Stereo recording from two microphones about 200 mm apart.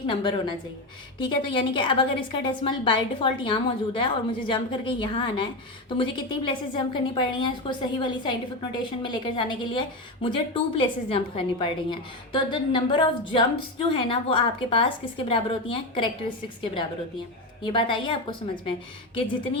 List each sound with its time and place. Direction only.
0.1 s a woman's voice: 25° left (ahead or behind)
6.5 s a woman's voice: 25° left (ahead or behind)
17.6 s a woman's voice: 25° left (ahead or behind)